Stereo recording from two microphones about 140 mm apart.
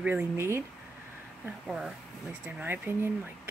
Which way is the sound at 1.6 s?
Centre (ahead or behind).